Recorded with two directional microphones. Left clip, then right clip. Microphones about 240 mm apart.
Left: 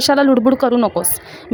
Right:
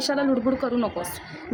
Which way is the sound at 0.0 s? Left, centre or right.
Left.